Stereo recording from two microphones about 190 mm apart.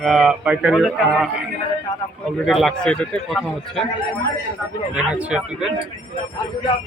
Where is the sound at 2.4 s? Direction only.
Centre (ahead or behind).